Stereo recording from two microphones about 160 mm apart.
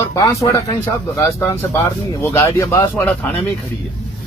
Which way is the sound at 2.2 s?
15° left (ahead or behind).